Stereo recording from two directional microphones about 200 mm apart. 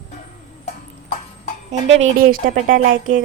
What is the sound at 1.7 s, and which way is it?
A woman's voice, 35° right (ahead or behind).